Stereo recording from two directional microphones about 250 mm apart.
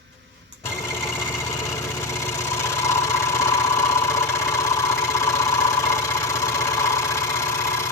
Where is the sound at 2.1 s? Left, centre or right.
Centre.